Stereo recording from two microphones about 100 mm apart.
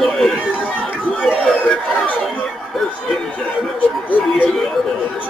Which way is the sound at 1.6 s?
15° left (ahead or behind).